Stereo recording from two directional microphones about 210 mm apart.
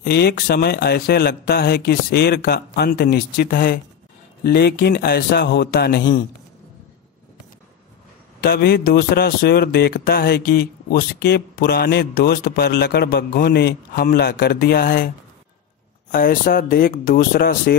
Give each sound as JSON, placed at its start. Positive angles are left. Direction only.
{"t": 0.0, "sound": "a man's voice", "side_deg": 50}
{"t": 8.4, "sound": "a man's voice", "side_deg": 50}
{"t": 16.1, "sound": "a man's voice", "side_deg": 40}